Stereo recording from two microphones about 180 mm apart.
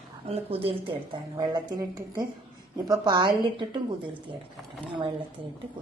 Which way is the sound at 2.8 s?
25° right (ahead or behind).